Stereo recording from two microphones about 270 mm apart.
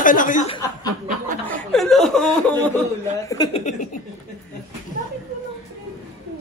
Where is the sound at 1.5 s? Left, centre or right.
Centre.